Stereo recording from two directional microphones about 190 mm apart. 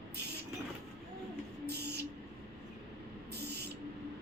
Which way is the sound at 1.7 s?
60° right (ahead or behind).